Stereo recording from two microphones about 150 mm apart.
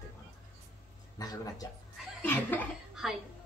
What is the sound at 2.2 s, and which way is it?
Laughter, 10° left (ahead or behind).